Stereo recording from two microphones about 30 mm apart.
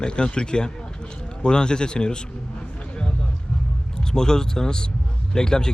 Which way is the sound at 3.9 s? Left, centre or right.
Left.